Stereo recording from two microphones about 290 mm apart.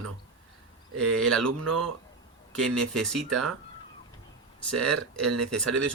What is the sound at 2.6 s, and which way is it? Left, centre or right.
Speech, centre.